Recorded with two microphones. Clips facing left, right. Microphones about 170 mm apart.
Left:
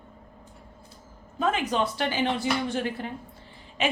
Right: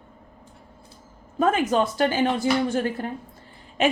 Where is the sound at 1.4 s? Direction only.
45° right (ahead or behind).